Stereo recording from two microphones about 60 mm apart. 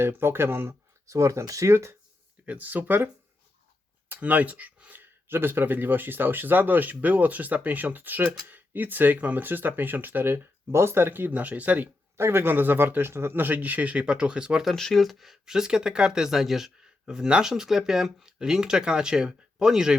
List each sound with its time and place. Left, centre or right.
0.0 s speech: right
0.7 s speech: right
2.5 s speech: right
4.1 s speech: right
12.1 s speech: right; by 14.7 s centre
14.7 s speech: centre